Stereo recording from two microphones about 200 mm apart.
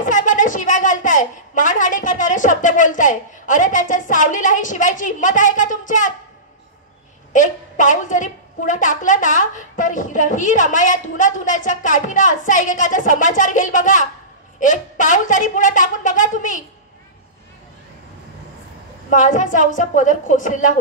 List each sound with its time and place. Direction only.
0.0 s a woman's voice: 40° left (ahead or behind)
7.3 s a woman's voice: 40° left (ahead or behind)
19.0 s a woman's voice: 40° left (ahead or behind)